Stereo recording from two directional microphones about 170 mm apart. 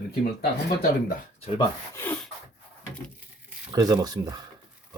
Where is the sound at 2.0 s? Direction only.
10° left (ahead or behind).